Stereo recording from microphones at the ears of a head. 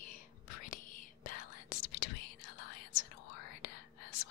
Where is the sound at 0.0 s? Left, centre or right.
Left.